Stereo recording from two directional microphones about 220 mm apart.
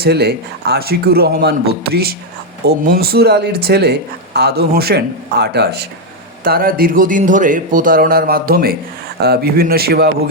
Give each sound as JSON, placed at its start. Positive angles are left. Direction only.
{"t": 0.0, "sound": "speech", "side_deg": -45}